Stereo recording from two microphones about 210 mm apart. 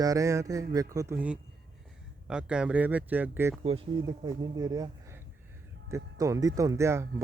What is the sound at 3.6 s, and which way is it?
Speech, 25° right (ahead or behind).